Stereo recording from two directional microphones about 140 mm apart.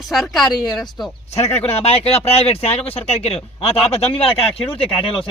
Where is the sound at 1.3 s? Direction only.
50° left (ahead or behind).